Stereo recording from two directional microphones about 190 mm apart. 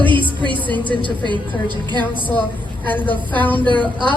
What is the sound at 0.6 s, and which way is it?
Speech, 10° left (ahead or behind).